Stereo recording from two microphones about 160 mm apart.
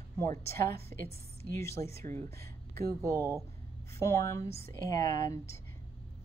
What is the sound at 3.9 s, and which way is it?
A woman's voice, 20° left (ahead or behind).